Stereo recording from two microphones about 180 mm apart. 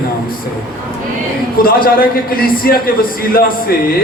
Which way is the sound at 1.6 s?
55° left (ahead or behind).